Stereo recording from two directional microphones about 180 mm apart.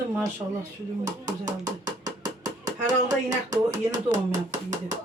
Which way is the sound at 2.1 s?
20° right (ahead or behind).